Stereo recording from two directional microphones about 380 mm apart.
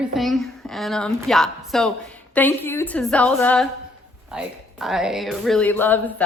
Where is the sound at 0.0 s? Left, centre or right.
Centre.